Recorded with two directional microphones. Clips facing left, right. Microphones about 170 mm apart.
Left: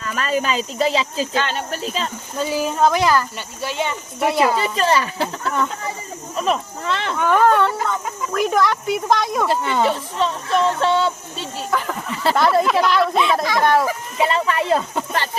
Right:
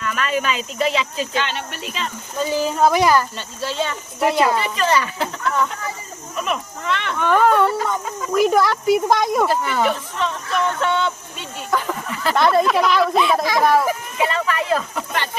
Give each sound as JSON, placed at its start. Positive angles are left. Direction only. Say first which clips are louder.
{"t": 0.0, "sound": "speech", "louder": "even", "side_deg": 35}
{"t": 2.5, "sound": "speech", "louder": "right 1 dB", "side_deg": 0}
{"t": 3.3, "sound": "speech", "louder": "right 1 dB", "side_deg": 15}
{"t": 4.2, "sound": "speech", "louder": "even", "side_deg": 0}
{"t": 4.5, "sound": "speech", "louder": "left 1 dB", "side_deg": 35}
{"t": 7.2, "sound": "speech", "louder": "even", "side_deg": 5}
{"t": 7.4, "sound": "speech", "louder": "even", "side_deg": -5}
{"t": 9.5, "sound": "speech", "louder": "left 1 dB", "side_deg": 25}
{"t": 11.7, "sound": "a sound", "louder": "right 2 dB", "side_deg": 0}
{"t": 12.3, "sound": "speech", "louder": "even", "side_deg": 0}
{"t": 14.2, "sound": "speech", "louder": "left 4 dB", "side_deg": 30}